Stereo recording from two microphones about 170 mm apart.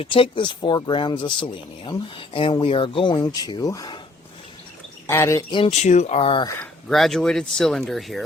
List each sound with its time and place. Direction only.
0.0 s speech: 30° left (ahead or behind)
5.0 s speech: 15° left (ahead or behind)
5.5 s speech: 30° left (ahead or behind)
6.8 s speech: centre (ahead or behind)